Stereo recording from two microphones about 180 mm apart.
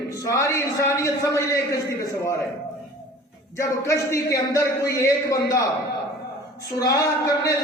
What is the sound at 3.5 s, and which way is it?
Speech, 15° left (ahead or behind).